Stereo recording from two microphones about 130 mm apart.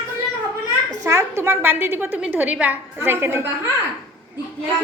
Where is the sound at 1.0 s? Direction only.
20° right (ahead or behind).